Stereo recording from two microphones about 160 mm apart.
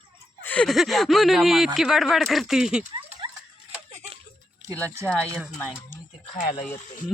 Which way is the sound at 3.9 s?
45° right (ahead or behind).